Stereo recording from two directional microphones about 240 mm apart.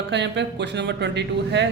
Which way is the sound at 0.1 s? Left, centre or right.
Right.